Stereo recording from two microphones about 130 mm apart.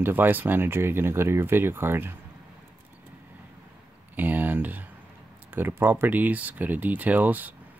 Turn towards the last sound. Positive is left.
turn(degrees=-15)  # may be behind; listen again after turning